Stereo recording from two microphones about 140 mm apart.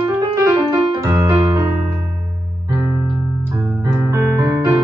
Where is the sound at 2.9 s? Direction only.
15° right (ahead or behind).